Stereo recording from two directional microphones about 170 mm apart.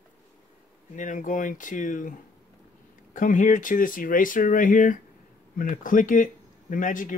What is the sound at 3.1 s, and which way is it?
Speech, 50° left (ahead or behind).